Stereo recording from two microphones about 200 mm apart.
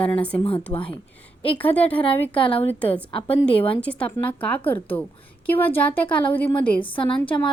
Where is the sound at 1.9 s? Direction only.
25° left (ahead or behind).